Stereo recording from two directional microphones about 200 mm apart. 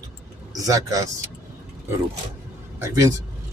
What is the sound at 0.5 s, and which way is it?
Speech, 15° right (ahead or behind).